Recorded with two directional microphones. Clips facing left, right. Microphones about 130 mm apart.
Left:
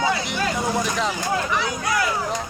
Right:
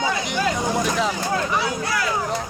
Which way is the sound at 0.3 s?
Centre (ahead or behind).